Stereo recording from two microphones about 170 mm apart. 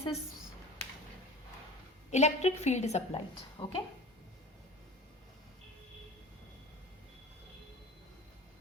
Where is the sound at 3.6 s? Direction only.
30° left (ahead or behind).